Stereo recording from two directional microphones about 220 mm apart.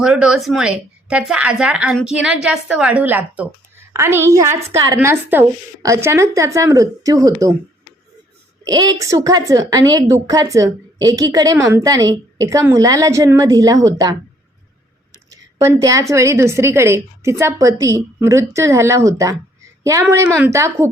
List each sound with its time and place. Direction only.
0.0 s a woman's voice: 5° right (ahead or behind)
8.6 s a woman's voice: 15° right (ahead or behind)
15.3 s a woman's voice: 15° right (ahead or behind)